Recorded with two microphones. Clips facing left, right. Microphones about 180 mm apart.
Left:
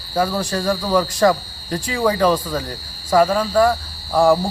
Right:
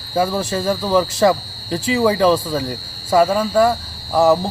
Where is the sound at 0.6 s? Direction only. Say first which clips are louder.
Even; 25° right (ahead or behind).